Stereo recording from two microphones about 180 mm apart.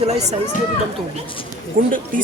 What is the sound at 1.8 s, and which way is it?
Speech, 50° right (ahead or behind).